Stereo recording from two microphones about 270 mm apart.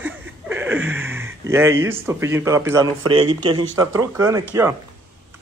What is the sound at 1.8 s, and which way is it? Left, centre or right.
A man's voice, centre.